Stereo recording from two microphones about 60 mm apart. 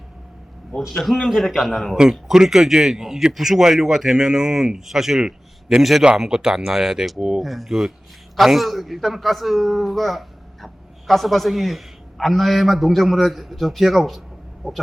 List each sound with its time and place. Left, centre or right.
0.8 s a man's voice: centre
2.0 s a man's voice: centre
5.2 s a sound: centre
5.8 s a man's voice: centre
7.4 s a man's voice: centre